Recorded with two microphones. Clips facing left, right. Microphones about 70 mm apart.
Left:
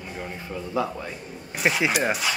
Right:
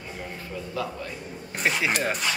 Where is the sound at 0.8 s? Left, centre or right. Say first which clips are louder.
Left 5 dB; left.